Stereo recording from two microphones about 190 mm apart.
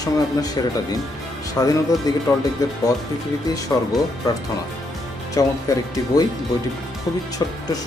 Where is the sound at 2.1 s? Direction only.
20° left (ahead or behind).